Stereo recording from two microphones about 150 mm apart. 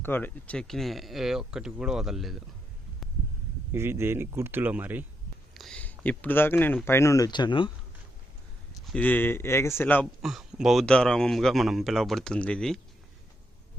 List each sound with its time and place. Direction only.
0.0 s speech: 15° left (ahead or behind)
3.7 s speech: 15° right (ahead or behind)
5.5 s speech: 5° left (ahead or behind); by 7.7 s 30° left (ahead or behind)
8.9 s speech: 10° left (ahead or behind)
10.2 s speech: 5° right (ahead or behind)